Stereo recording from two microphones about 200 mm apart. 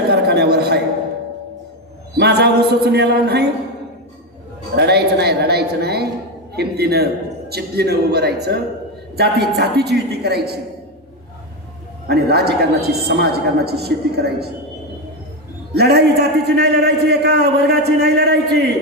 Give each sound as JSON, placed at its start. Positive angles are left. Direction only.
{"t": 0.1, "sound": "a sound", "side_deg": -55}
{"t": 2.1, "sound": "a man's voice", "side_deg": -55}
{"t": 4.9, "sound": "a man's voice", "side_deg": -55}
{"t": 12.0, "sound": "a man's voice", "side_deg": -55}
{"t": 15.7, "sound": "a man's voice", "side_deg": -55}